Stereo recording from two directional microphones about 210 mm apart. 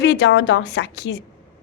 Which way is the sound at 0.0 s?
55° left (ahead or behind).